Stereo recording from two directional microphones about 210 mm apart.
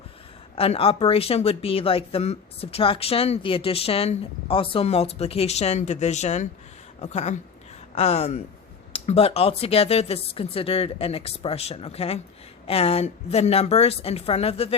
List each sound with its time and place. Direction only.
0.5 s speech: 25° left (ahead or behind)